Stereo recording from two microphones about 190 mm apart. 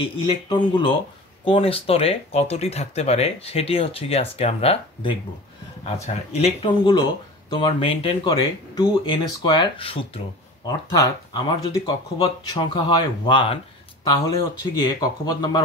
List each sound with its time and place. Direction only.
0.0 s speech: 25° left (ahead or behind)